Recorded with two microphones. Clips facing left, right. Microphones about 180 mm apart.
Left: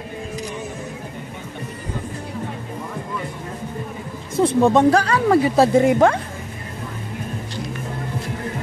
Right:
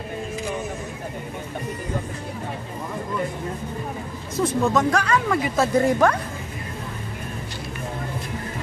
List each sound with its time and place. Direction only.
4.4 s speech: 30° left (ahead or behind)